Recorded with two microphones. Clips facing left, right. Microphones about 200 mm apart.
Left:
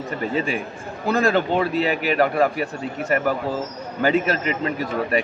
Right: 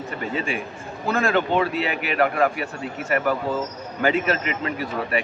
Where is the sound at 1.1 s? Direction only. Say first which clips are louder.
Left 2 dB; 40° left (ahead or behind).